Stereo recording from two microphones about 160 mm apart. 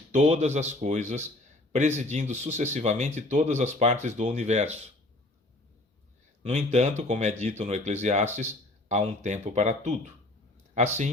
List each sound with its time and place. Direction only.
0.1 s speech: 40° right (ahead or behind)
6.4 s speech: 45° right (ahead or behind)